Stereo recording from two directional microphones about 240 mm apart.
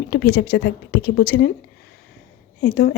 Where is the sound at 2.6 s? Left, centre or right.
Left.